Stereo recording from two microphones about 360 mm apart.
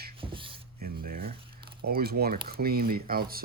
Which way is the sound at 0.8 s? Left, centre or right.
Right.